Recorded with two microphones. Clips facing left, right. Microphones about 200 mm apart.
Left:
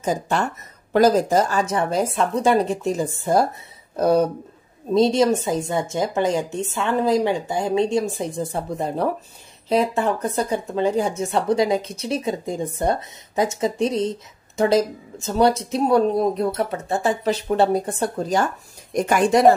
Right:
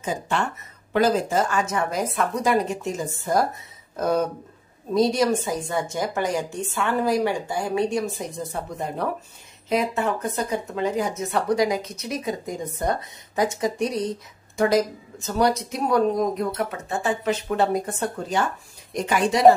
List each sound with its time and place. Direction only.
0.0 s a woman's voice: 40° left (ahead or behind)
18.9 s speech: 50° left (ahead or behind)